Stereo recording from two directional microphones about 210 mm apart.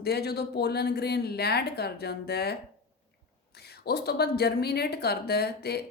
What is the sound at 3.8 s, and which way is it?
A woman's voice, 50° left (ahead or behind).